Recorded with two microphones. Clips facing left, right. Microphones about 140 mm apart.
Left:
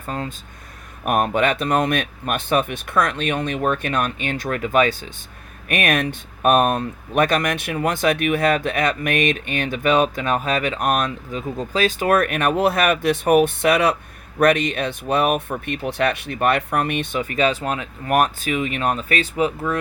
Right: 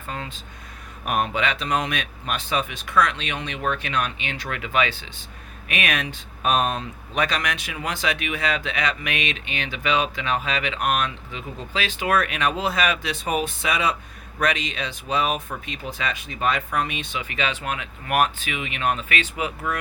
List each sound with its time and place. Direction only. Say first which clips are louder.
0.1 s speech: left 6 dB; 40° left (ahead or behind)